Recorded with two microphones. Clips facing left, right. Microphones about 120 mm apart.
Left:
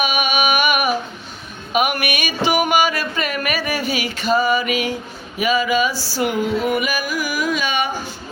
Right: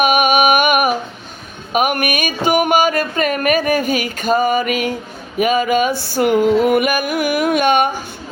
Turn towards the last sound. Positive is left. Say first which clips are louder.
# right 7 dB
turn(degrees=-55)  # may be behind; listen again after turning